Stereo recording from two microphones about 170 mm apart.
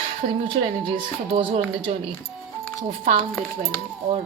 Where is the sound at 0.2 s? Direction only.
55° right (ahead or behind).